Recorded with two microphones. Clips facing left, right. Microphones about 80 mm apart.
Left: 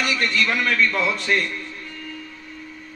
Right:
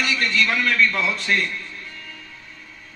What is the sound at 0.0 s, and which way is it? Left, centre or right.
A man's voice, left.